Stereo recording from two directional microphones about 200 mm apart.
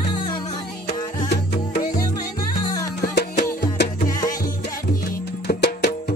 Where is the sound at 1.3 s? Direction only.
50° left (ahead or behind).